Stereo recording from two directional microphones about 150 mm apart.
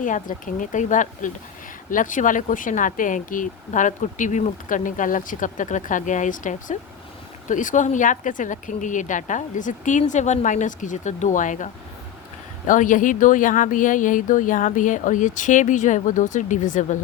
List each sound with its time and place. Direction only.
0.0 s speech: 60° left (ahead or behind)